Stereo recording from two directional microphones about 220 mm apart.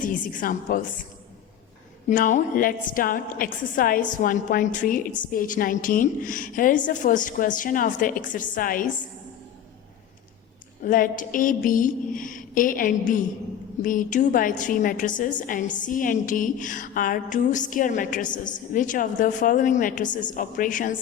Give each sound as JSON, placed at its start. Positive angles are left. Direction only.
{"t": 0.0, "sound": "a woman's voice", "side_deg": 40}
{"t": 2.0, "sound": "a woman's voice", "side_deg": 35}
{"t": 10.8, "sound": "a woman's voice", "side_deg": 35}